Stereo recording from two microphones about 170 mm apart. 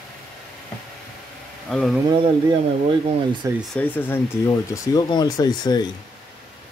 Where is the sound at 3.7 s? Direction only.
10° left (ahead or behind).